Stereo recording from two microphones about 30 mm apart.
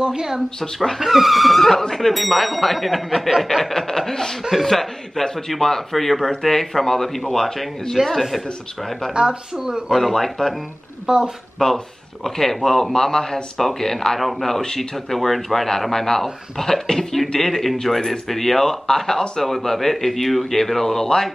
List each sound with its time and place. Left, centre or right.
0.0 s speech: right
0.9 s speech: centre
3.2 s a sound: centre
3.7 s speech: centre
7.9 s speech: centre
9.1 s speech: right
9.8 s speech: centre
10.1 s speech: centre
11.1 s speech: right
11.6 s speech: left
17.4 s speech: centre